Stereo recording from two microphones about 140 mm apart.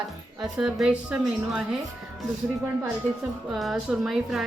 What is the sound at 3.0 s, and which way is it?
Speech, 60° right (ahead or behind).